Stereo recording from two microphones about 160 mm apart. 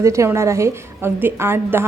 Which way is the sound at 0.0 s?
20° right (ahead or behind).